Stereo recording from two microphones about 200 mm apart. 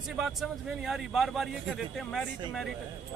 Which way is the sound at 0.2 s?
Centre (ahead or behind).